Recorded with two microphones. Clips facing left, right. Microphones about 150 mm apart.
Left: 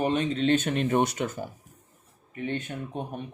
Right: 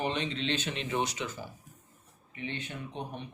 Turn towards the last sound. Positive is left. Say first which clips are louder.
# left 5 dB
turn(degrees=50)  # may be behind; listen again after turning